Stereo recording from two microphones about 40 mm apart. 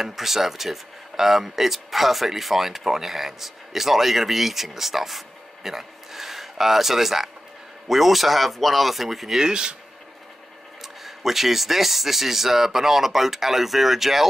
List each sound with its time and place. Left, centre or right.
0.0 s speech: centre
9.4 s speech: centre
10.8 s speech: centre